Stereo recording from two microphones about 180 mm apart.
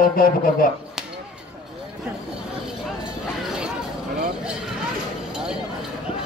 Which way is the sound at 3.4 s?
5° right (ahead or behind).